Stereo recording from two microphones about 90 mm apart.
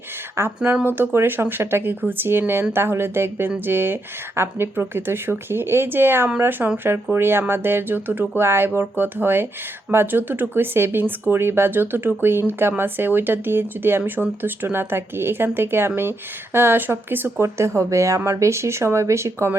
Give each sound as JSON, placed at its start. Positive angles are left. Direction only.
{"t": 0.6, "sound": "speech", "side_deg": -20}